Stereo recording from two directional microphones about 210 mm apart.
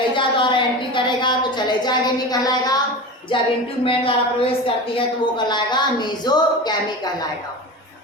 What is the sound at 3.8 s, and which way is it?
A woman's voice, 25° left (ahead or behind).